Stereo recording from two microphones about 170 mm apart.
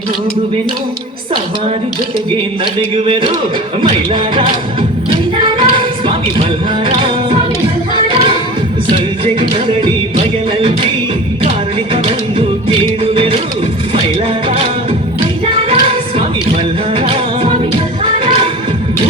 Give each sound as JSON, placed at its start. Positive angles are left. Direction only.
{"t": 3.1, "sound": "speech", "side_deg": -30}
{"t": 3.8, "sound": "music", "side_deg": -30}
{"t": 7.9, "sound": "a sound", "side_deg": -30}
{"t": 9.2, "sound": "music", "side_deg": -30}
{"t": 12.0, "sound": "music", "side_deg": -30}
{"t": 15.7, "sound": "music", "side_deg": -30}